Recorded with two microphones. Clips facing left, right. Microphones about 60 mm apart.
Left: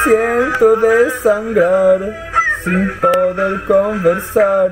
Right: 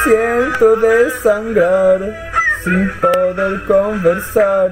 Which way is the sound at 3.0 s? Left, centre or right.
Centre.